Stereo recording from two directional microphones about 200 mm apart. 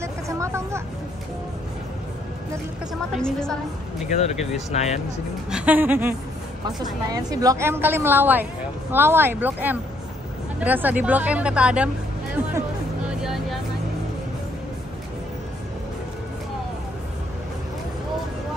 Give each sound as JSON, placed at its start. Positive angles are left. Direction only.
{"t": 0.0, "sound": "vehicle", "side_deg": -15}
{"t": 3.2, "sound": "a woman's voice", "side_deg": 5}
{"t": 4.7, "sound": "speech", "side_deg": 35}
{"t": 5.5, "sound": "a woman's voice", "side_deg": -10}
{"t": 13.2, "sound": "music", "side_deg": 0}